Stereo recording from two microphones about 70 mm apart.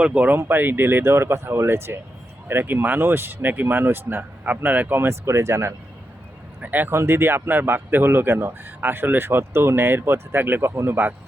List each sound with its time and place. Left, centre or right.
0.0 s speech: centre
0.3 s speech: right
6.6 s speech: right
6.9 s speech: right